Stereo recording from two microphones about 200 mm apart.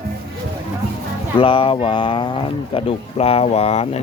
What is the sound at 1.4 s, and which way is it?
Speech, 25° left (ahead or behind).